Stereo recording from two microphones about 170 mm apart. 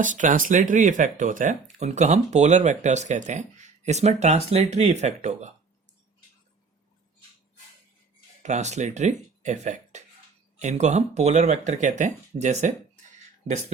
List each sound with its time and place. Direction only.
0.0 s speech: 50° right (ahead or behind)
8.4 s speech: 45° right (ahead or behind)